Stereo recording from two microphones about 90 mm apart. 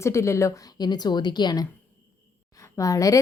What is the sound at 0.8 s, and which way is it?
Speech, 50° left (ahead or behind).